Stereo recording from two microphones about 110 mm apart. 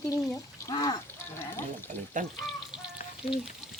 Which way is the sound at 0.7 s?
40° left (ahead or behind).